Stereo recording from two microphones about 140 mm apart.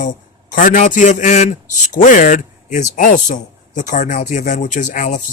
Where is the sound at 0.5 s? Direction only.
70° left (ahead or behind).